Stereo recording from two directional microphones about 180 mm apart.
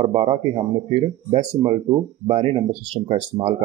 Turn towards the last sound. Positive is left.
turn(degrees=-30)  # may be behind; listen again after turning